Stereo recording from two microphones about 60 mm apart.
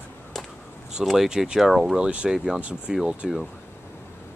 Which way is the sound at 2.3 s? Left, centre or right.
Centre.